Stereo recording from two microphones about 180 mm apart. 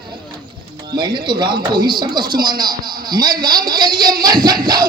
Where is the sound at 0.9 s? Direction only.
25° right (ahead or behind).